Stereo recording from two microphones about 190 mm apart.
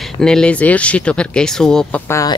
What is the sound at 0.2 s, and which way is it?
Speech, 5° left (ahead or behind).